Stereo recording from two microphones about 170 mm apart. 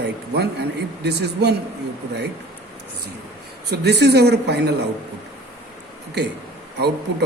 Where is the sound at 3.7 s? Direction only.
75° right (ahead or behind).